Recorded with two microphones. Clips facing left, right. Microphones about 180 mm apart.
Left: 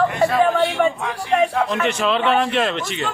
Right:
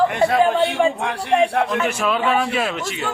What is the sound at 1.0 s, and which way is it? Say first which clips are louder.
Speech: right 1 dB; 65° right (ahead or behind).